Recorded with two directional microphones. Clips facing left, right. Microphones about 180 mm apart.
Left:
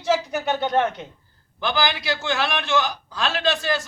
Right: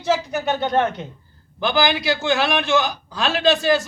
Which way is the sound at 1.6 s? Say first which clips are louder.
Right 4 dB; 5° right (ahead or behind).